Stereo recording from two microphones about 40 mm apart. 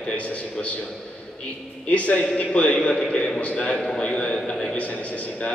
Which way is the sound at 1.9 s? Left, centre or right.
Left.